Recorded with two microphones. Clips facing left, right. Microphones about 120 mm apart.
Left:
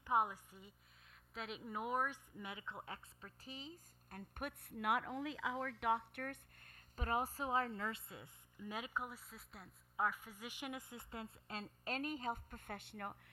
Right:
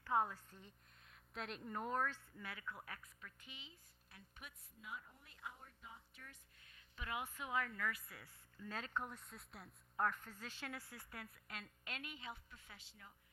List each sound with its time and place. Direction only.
0.0 s a woman's voice: 15° left (ahead or behind); by 13.1 s 60° left (ahead or behind)